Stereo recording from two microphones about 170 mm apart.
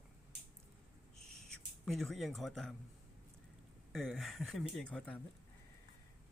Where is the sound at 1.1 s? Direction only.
Centre (ahead or behind).